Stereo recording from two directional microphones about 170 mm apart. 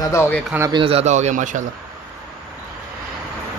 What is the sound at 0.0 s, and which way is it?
Speech, 15° left (ahead or behind).